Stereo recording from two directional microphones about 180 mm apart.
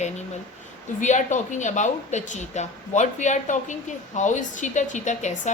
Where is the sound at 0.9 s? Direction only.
40° left (ahead or behind).